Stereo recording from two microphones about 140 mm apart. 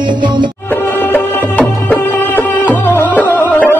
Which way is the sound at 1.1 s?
15° left (ahead or behind).